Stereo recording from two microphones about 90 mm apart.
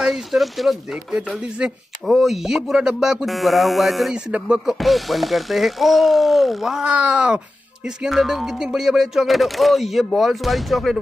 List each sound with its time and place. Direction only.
0.0 s speech: 5° right (ahead or behind)
0.9 s music: 20° right (ahead or behind)
2.0 s speech: centre (ahead or behind)
4.3 s music: 10° right (ahead or behind)
4.7 s speech: centre (ahead or behind)